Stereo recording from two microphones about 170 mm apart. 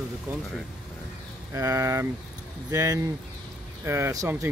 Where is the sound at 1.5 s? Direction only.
20° right (ahead or behind).